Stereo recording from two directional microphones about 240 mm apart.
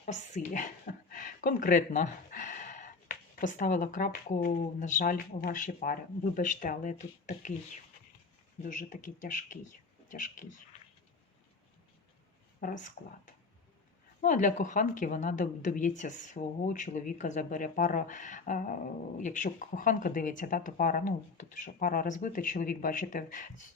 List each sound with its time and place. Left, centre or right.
0.0 s speech: left
12.5 s speech: left